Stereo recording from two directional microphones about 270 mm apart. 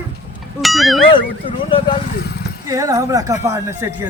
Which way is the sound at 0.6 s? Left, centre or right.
Centre.